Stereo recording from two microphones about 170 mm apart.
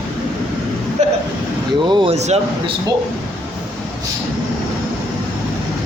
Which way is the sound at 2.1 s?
40° right (ahead or behind).